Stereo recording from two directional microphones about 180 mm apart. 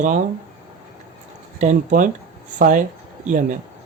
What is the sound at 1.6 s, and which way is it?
Speech, 45° right (ahead or behind).